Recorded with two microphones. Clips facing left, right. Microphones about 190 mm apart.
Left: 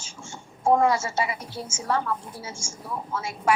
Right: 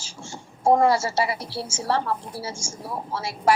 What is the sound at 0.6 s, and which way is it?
A woman's voice, 35° right (ahead or behind).